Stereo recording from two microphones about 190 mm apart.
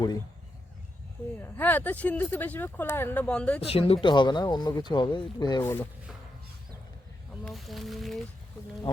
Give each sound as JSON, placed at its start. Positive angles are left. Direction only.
{"t": 1.4, "sound": "speech", "side_deg": 10}
{"t": 3.6, "sound": "speech", "side_deg": 30}
{"t": 7.4, "sound": "speech", "side_deg": 0}